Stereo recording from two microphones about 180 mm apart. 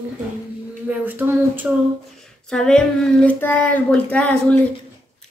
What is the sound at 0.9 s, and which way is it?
Speech, 10° right (ahead or behind).